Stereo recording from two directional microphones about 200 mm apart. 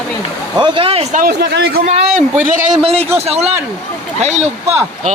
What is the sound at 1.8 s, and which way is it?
Speech, 35° right (ahead or behind).